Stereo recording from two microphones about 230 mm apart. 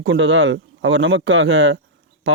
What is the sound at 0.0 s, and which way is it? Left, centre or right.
Speech, right.